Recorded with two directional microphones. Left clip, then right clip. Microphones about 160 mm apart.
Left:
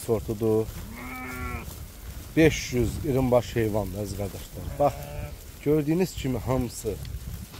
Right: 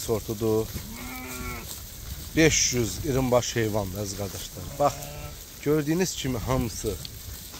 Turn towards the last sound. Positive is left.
turn(degrees=0)  # may be behind; listen again after turning